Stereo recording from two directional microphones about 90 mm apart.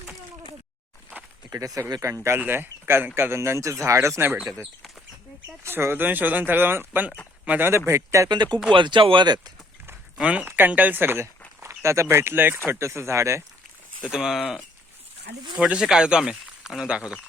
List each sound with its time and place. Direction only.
1.5 s speech: 40° right (ahead or behind)
5.6 s speech: 25° right (ahead or behind)
7.9 s speech: 35° right (ahead or behind)
8.3 s speech: 55° right (ahead or behind)
10.2 s speech: 15° right (ahead or behind); by 13.4 s 30° right (ahead or behind)
14.0 s speech: 10° right (ahead or behind)
15.5 s speech: 10° right (ahead or behind)